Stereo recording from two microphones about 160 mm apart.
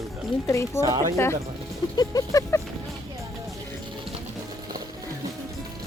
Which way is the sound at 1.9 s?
20° left (ahead or behind).